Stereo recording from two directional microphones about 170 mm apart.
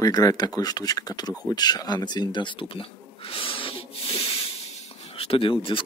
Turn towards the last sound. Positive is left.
turn(degrees=30)  # may be behind; listen again after turning